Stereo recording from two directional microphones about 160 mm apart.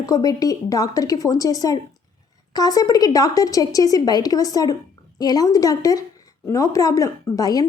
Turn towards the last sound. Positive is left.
turn(degrees=20)  # may be behind; listen again after turning